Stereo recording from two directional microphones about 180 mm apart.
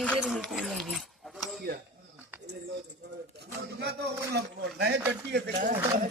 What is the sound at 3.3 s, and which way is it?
Speech, 70° right (ahead or behind).